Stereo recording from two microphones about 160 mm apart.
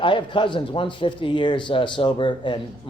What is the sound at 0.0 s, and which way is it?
Speech, 30° left (ahead or behind).